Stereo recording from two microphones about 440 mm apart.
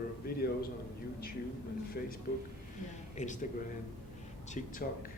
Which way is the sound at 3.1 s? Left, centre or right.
Centre.